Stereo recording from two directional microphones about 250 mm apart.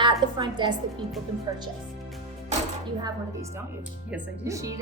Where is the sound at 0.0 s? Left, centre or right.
Centre.